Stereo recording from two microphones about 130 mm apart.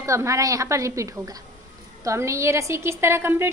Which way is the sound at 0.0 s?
25° right (ahead or behind).